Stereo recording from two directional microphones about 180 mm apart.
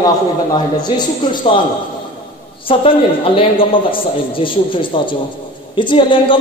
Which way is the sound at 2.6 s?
30° left (ahead or behind).